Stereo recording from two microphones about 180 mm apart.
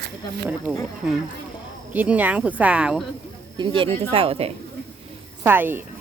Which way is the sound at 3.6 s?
30° right (ahead or behind).